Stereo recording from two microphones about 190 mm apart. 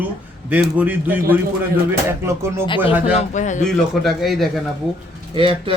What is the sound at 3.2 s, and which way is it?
Speech, 40° left (ahead or behind).